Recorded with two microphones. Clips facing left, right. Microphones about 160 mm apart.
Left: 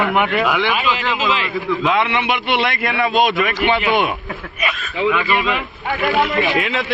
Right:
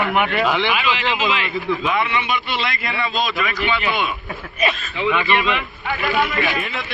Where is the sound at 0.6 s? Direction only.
40° left (ahead or behind).